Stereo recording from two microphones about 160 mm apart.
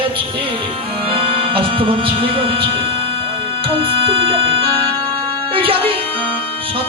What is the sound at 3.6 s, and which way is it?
Music, 35° right (ahead or behind).